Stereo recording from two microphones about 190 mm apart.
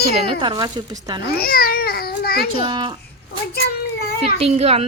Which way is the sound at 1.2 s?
55° left (ahead or behind).